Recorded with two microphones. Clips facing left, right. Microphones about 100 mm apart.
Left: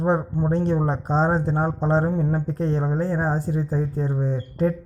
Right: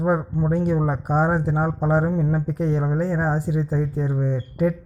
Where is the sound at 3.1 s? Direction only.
20° left (ahead or behind).